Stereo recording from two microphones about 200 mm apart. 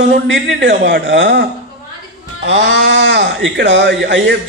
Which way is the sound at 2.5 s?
65° right (ahead or behind).